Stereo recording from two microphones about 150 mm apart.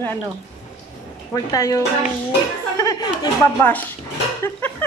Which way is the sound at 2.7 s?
25° left (ahead or behind).